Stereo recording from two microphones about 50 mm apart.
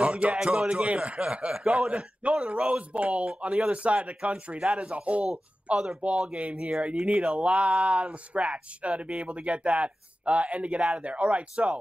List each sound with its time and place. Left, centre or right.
0.0 s speech: right
6.0 s speech: centre